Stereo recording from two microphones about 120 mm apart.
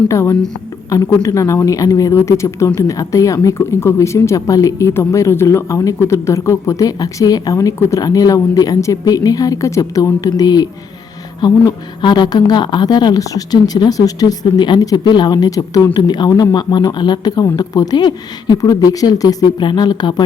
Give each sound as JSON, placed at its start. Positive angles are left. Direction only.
{"t": 0.1, "sound": "a woman's voice", "side_deg": 25}